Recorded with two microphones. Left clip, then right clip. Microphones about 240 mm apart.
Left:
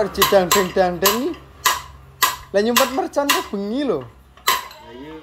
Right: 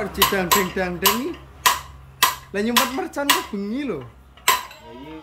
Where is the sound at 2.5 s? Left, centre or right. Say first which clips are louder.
Left 4 dB; centre.